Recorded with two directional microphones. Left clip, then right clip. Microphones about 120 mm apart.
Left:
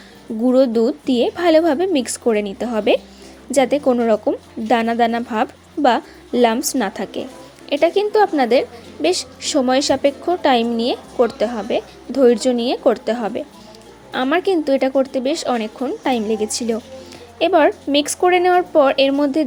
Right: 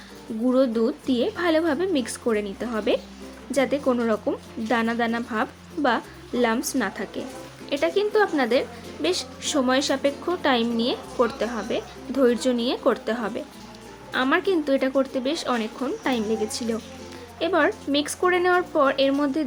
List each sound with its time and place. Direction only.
0.4 s a woman's voice: 40° left (ahead or behind)